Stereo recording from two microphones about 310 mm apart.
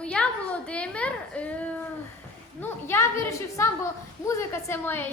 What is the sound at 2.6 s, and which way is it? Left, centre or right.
A woman's voice, centre.